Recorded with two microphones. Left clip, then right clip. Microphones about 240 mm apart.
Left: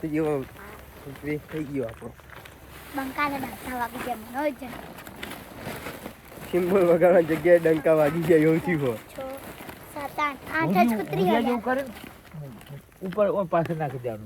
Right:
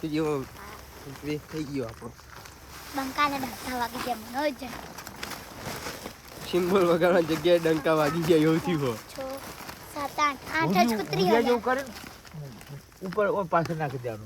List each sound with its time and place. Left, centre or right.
0.2 s speech: centre
2.9 s speech: right
5.3 s a sound: right
6.5 s speech: centre
9.3 s a sound: right
13.1 s speech: right